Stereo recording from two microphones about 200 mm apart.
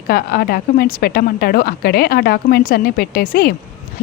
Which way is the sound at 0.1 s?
50° left (ahead or behind).